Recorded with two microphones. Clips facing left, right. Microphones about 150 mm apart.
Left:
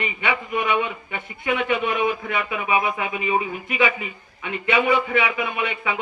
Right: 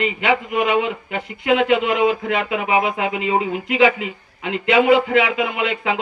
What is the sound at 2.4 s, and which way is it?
Speech, 80° right.